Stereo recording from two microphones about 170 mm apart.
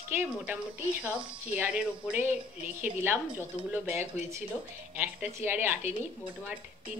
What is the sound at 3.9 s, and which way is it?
Speech, 40° left (ahead or behind).